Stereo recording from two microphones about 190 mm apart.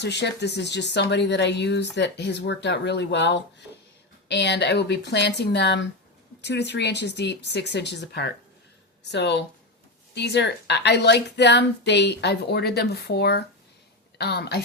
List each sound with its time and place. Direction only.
0.0 s speech: 65° left (ahead or behind)